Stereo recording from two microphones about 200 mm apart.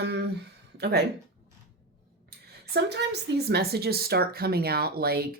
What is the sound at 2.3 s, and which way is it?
A woman's voice, 50° right (ahead or behind).